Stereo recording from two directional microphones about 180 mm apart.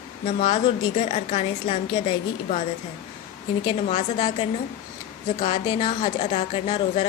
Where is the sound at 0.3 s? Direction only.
35° left (ahead or behind).